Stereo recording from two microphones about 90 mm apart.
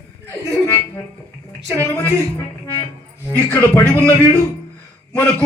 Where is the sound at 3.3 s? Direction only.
25° left (ahead or behind).